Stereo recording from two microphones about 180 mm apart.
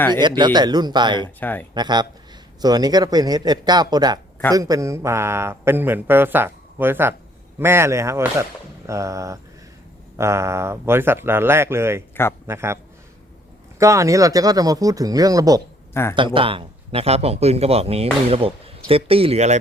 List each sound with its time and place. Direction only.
0.2 s speech: 25° right (ahead or behind)
1.4 s speech: 10° left (ahead or behind)
1.7 s speech: 25° right (ahead or behind)